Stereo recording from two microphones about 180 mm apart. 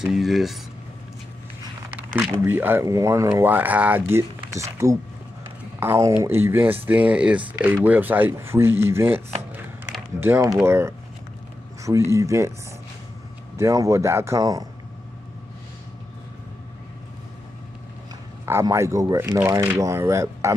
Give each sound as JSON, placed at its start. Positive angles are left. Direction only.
{"t": 0.0, "sound": "speech", "side_deg": 0}
{"t": 1.9, "sound": "speech", "side_deg": -10}
{"t": 9.5, "sound": "a sound", "side_deg": -10}
{"t": 12.1, "sound": "speech", "side_deg": -15}
{"t": 13.6, "sound": "speech", "side_deg": -15}
{"t": 18.4, "sound": "speech", "side_deg": -15}